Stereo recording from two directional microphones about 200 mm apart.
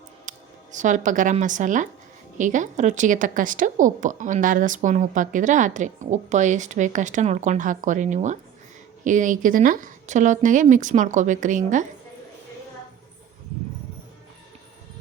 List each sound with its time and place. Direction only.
0.3 s a woman's voice: 40° right (ahead or behind)